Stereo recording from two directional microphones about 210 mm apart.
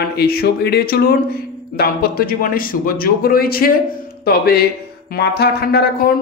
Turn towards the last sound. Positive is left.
turn(degrees=50)  # may be behind; listen again after turning